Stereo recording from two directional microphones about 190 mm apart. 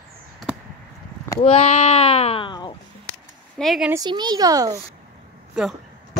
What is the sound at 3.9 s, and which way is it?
Speech, 20° right (ahead or behind).